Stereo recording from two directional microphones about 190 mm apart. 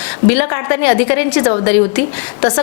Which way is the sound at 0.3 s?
10° left (ahead or behind).